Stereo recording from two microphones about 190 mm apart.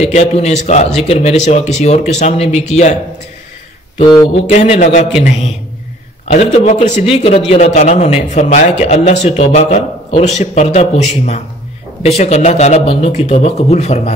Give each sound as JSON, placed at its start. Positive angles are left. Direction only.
{"t": 0.0, "sound": "a man's voice", "side_deg": 35}
{"t": 4.0, "sound": "speech", "side_deg": 25}
{"t": 4.5, "sound": "a man's voice", "side_deg": 35}